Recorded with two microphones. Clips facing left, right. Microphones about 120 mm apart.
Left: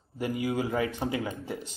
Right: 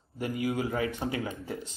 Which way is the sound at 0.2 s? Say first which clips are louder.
Left 1 dB; 25° left (ahead or behind).